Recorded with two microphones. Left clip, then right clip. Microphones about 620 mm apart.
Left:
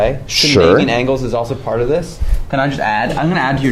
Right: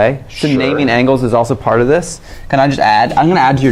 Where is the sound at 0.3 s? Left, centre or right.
Left.